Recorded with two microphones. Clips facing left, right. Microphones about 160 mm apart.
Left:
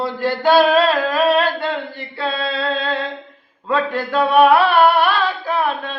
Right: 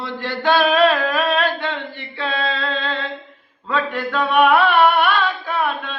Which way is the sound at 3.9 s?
35° left (ahead or behind).